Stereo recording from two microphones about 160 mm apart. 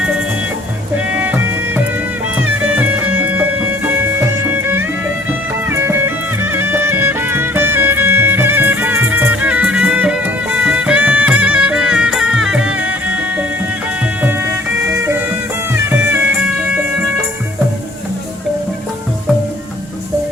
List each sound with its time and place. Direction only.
1.1 s music: 10° right (ahead or behind)
4.6 s music: 15° right (ahead or behind)
15.9 s music: 10° right (ahead or behind)